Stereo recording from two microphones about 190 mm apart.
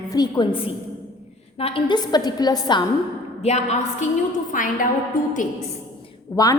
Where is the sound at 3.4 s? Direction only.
35° left (ahead or behind).